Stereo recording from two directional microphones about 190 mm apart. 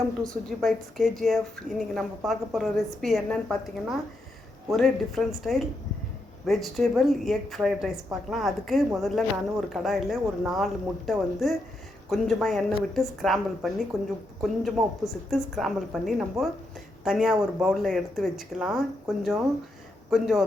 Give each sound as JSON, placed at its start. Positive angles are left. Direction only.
{"t": 0.2, "sound": "a woman's voice", "side_deg": 0}